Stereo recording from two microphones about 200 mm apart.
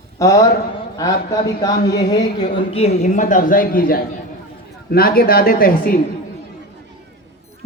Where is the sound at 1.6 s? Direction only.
20° left (ahead or behind); by 5.9 s 45° left (ahead or behind).